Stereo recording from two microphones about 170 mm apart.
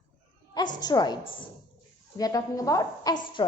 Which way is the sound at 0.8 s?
25° left (ahead or behind).